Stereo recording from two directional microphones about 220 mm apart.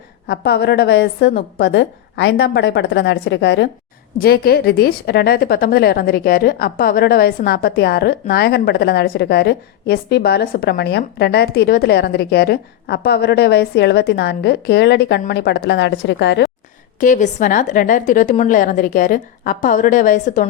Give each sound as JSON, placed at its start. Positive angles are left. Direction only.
{"t": 0.3, "sound": "a woman's voice", "side_deg": 45}
{"t": 17.0, "sound": "a woman's voice", "side_deg": 35}